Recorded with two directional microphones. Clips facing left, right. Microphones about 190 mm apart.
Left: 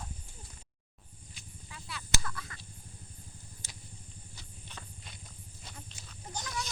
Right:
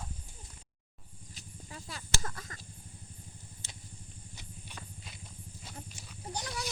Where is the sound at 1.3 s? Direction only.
40° right (ahead or behind).